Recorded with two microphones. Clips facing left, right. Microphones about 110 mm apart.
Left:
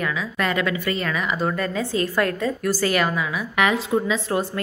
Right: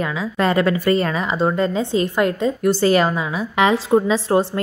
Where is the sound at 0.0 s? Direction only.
30° right (ahead or behind).